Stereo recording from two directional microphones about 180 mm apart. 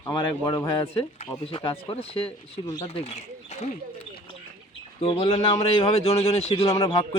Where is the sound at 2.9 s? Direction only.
35° left (ahead or behind).